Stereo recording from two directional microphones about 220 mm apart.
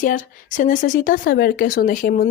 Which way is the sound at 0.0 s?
35° left (ahead or behind).